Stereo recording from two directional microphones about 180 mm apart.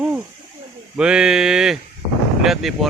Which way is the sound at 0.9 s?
5° right (ahead or behind).